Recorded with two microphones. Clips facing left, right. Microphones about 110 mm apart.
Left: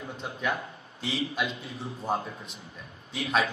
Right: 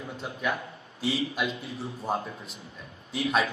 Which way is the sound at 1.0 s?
35° right (ahead or behind).